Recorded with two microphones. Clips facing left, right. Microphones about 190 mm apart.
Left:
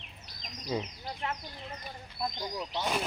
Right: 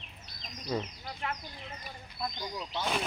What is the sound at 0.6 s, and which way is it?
Speech, 10° left (ahead or behind).